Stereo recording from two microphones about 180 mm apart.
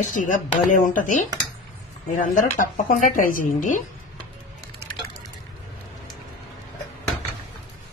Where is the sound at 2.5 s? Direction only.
50° left (ahead or behind).